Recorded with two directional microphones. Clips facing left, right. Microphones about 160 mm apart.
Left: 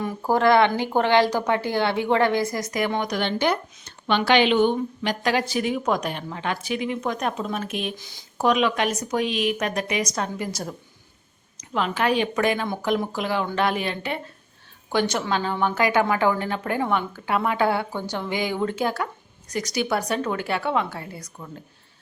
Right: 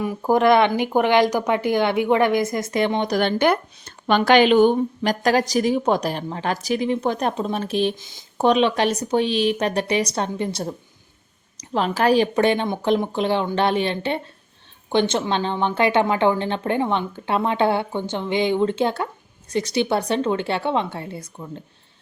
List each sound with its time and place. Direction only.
0.3 s a woman's voice: 20° right (ahead or behind)
3.2 s a woman's voice: 50° right (ahead or behind); by 21.6 s 15° right (ahead or behind)